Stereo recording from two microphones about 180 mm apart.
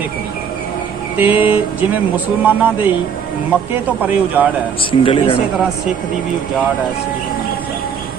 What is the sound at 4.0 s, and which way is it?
Speech, 10° right (ahead or behind).